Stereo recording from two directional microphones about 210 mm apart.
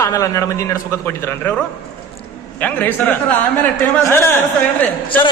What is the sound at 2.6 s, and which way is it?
A man's voice, 10° left (ahead or behind).